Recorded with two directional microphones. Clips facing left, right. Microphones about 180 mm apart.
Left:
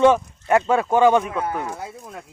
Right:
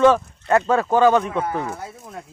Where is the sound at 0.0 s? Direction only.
15° left (ahead or behind).